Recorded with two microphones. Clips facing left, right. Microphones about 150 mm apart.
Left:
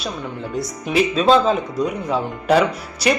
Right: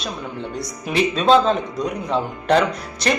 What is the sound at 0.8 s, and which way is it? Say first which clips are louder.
Speech: left 1 dB; centre (ahead or behind).